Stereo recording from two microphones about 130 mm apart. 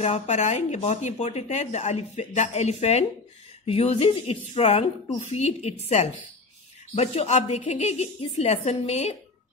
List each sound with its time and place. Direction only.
0.0 s speech: 60° left (ahead or behind)